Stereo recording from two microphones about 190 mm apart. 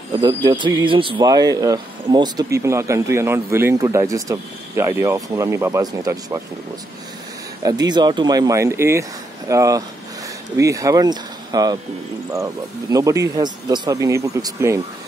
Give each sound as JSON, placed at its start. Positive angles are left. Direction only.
{"t": 0.2, "sound": "speech", "side_deg": -20}
{"t": 7.6, "sound": "speech", "side_deg": -20}
{"t": 12.9, "sound": "speech", "side_deg": -15}